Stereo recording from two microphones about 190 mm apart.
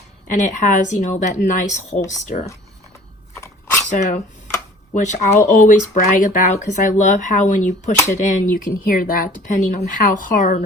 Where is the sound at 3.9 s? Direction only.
40° left (ahead or behind).